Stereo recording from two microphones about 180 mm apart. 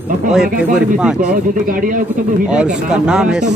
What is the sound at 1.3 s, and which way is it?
Speech, 50° right (ahead or behind).